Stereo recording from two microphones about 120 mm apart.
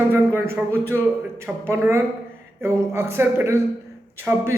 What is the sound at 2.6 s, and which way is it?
A man's voice, 20° right (ahead or behind).